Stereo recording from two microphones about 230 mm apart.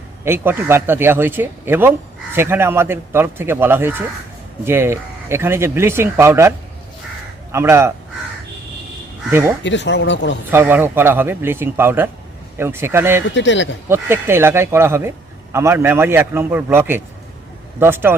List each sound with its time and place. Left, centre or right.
0.3 s speech: centre
7.5 s speech: centre
9.6 s speech: left
10.5 s speech: centre
13.3 s speech: left
13.8 s speech: centre